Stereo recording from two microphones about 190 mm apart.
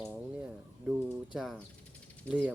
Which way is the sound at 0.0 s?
5° right (ahead or behind).